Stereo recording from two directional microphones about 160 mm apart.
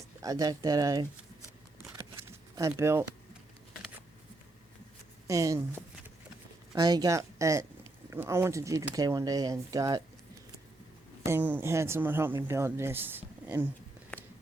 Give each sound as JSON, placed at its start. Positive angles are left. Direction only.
{"t": 0.2, "sound": "speech", "side_deg": -25}
{"t": 2.3, "sound": "speech", "side_deg": -15}
{"t": 5.3, "sound": "speech", "side_deg": -20}
{"t": 6.7, "sound": "speech", "side_deg": -25}
{"t": 11.3, "sound": "speech", "side_deg": -10}